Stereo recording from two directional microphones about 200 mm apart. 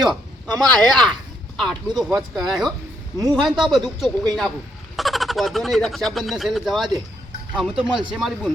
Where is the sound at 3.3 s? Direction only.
Centre (ahead or behind).